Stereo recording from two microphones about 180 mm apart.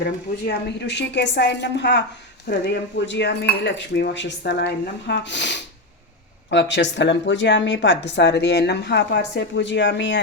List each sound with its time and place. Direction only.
0.0 s speech: 70° left (ahead or behind); by 10.2 s 85° left